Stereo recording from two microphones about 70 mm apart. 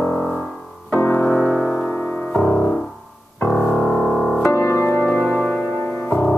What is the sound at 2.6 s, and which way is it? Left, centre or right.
Music, centre.